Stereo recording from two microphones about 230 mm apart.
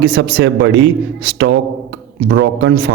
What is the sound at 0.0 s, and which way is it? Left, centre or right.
Speech, right.